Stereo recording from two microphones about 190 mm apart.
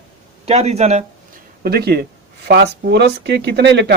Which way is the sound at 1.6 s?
55° right (ahead or behind).